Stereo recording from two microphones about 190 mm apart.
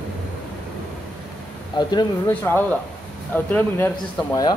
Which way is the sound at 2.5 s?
10° left (ahead or behind).